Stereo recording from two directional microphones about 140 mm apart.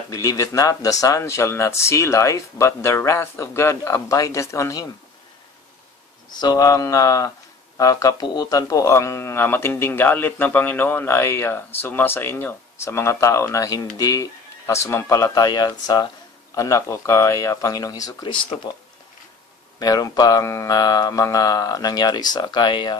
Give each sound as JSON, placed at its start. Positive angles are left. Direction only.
{"t": 0.1, "sound": "speech", "side_deg": 25}
{"t": 6.3, "sound": "speech", "side_deg": 30}
{"t": 19.8, "sound": "speech", "side_deg": 30}